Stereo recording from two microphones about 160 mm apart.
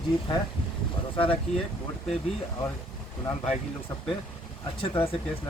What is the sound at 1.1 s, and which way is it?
Speech, 35° left (ahead or behind).